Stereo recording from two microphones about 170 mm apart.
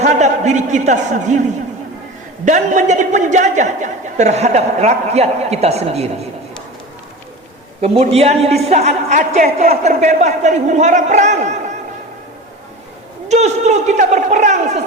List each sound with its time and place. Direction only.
0.0 s a man's voice: 45° right (ahead or behind)
2.4 s a man's voice: 45° right (ahead or behind)
7.8 s a man's voice: 35° right (ahead or behind)
13.2 s a man's voice: 40° right (ahead or behind)